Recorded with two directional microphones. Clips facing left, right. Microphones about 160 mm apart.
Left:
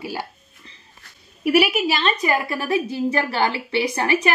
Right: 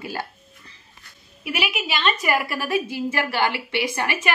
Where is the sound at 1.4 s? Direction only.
40° left (ahead or behind).